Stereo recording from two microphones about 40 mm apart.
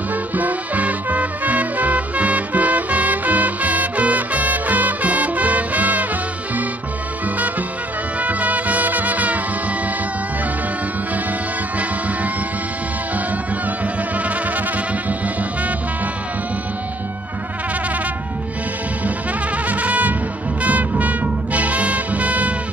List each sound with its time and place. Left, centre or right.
0.1 s music: right
8.2 s music: right
19.7 s music: right